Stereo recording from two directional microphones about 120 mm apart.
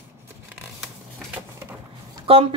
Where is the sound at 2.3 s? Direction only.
50° right (ahead or behind).